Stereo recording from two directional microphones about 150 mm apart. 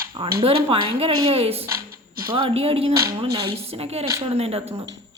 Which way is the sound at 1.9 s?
80° right.